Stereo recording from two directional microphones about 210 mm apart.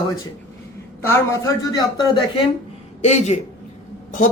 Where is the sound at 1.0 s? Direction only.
15° left (ahead or behind).